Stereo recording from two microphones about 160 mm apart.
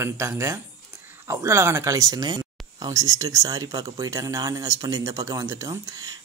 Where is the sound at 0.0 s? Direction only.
20° right (ahead or behind).